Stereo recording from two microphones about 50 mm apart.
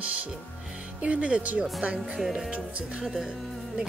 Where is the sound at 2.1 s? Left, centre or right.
Centre.